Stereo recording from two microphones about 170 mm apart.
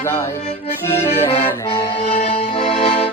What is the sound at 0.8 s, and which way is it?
Accordion, 15° left (ahead or behind).